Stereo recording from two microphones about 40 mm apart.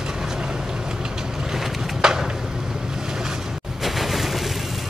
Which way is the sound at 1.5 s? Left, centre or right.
Centre.